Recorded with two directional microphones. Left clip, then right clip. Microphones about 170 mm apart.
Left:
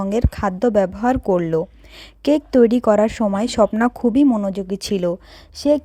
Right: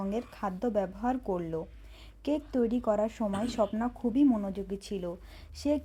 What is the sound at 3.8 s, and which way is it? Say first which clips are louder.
Speech: left 15 dB; 60° left (ahead or behind).